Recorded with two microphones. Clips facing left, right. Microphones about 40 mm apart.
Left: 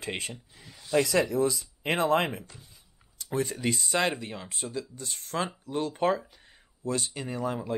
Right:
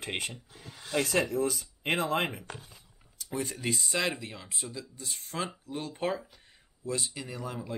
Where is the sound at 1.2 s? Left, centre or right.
Left.